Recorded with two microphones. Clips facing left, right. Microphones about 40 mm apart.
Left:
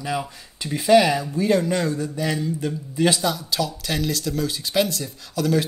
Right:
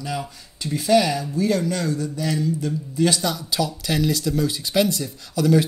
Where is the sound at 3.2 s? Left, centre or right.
Centre.